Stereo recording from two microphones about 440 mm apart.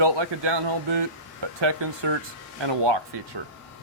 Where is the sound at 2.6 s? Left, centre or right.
Right.